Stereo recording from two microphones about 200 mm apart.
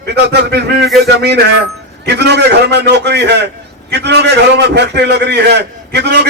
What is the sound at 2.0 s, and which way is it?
A man's voice, 55° right (ahead or behind).